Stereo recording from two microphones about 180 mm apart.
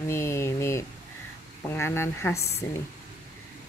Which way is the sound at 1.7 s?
15° left (ahead or behind).